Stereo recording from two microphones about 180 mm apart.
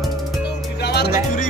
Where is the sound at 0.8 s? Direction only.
65° left (ahead or behind).